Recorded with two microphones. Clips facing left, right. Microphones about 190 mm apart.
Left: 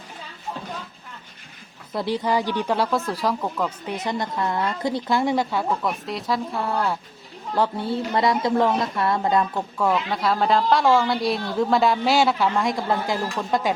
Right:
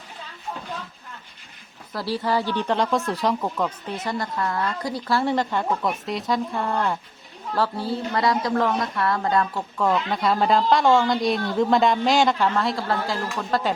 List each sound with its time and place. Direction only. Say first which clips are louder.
1.9 s a woman's voice: left 1 dB; 20° left (ahead or behind); by 3.7 s centre (ahead or behind)
3.8 s a woman's voice: left 1 dB; 15° left (ahead or behind)
7.5 s a woman's voice: left 2 dB; 20° left (ahead or behind)
9.7 s a woman's voice: right 1 dB; 5° left (ahead or behind)